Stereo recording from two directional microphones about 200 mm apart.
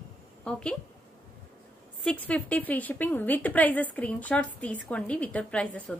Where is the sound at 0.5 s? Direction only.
5° left (ahead or behind).